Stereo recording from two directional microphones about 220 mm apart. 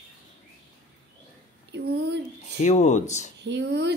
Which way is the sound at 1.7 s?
50° right (ahead or behind).